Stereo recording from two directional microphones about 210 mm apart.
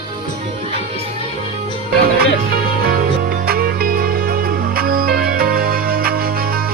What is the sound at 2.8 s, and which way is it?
Music, 45° right (ahead or behind).